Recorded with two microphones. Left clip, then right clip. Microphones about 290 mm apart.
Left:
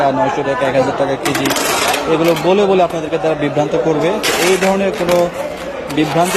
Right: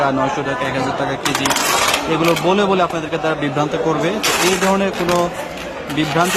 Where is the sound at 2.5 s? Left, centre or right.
Centre.